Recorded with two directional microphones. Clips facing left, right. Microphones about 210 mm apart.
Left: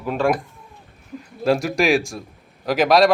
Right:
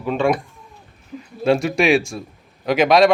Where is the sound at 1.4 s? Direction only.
Centre (ahead or behind).